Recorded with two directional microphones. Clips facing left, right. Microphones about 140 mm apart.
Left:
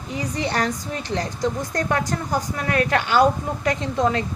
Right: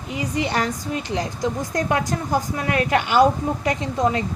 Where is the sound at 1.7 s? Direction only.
20° right (ahead or behind).